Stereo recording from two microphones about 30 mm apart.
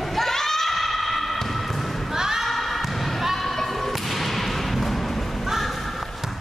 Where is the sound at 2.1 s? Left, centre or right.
Centre.